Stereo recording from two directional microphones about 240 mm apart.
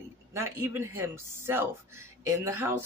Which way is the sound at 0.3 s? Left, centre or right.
Centre.